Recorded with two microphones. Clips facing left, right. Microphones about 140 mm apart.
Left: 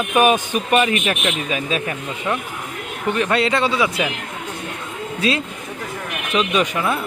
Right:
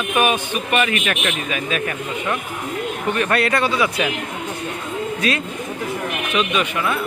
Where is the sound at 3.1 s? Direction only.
20° left (ahead or behind).